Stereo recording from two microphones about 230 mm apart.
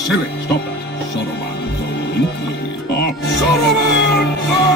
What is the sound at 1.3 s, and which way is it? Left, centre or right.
Music, left.